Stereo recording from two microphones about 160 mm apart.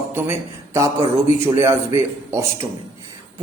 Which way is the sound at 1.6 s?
20° right (ahead or behind).